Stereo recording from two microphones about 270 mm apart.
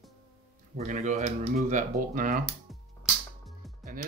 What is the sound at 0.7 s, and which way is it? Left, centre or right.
Speech, right.